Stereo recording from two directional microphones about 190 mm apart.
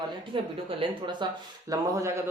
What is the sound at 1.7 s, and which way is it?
Speech, 15° right (ahead or behind).